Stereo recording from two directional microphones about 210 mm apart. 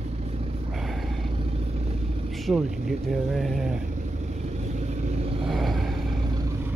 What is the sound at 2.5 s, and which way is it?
Speech, 5° right (ahead or behind).